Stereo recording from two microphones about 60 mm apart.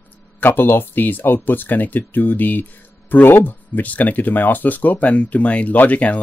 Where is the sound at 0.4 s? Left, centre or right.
Left.